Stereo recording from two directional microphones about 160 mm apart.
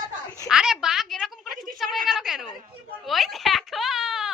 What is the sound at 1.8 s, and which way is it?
Speech, centre (ahead or behind).